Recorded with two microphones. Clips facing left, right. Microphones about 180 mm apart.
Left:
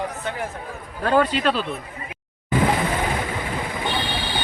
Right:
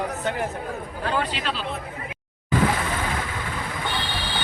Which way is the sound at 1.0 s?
45° left (ahead or behind).